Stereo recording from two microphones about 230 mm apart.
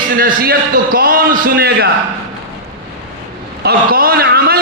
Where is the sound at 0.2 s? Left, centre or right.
Right.